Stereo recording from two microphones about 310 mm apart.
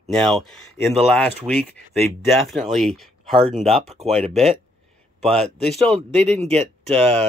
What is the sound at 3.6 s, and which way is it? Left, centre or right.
Speech, centre.